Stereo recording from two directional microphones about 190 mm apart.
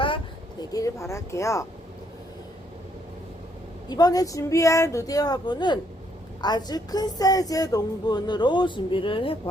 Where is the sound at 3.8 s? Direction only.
20° left (ahead or behind).